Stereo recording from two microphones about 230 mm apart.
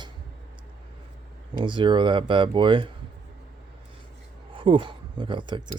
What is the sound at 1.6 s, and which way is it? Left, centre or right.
Speech, right.